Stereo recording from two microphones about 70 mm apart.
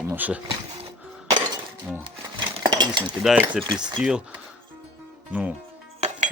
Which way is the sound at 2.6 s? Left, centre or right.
Right.